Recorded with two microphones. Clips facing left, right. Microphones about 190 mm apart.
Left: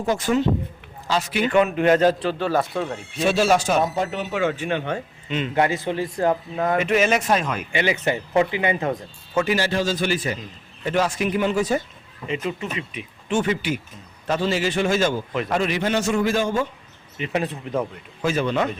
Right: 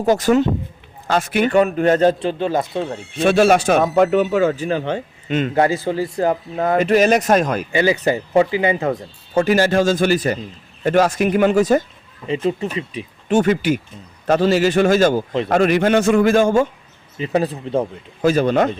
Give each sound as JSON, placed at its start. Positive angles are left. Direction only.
{"t": 0.0, "sound": "speech", "side_deg": -40}
{"t": 1.0, "sound": "speech", "side_deg": -55}
{"t": 1.5, "sound": "speech", "side_deg": -35}
{"t": 2.2, "sound": "speech", "side_deg": -20}
{"t": 3.2, "sound": "speech", "side_deg": -55}
{"t": 12.3, "sound": "speech", "side_deg": -30}
{"t": 17.2, "sound": "speech", "side_deg": -35}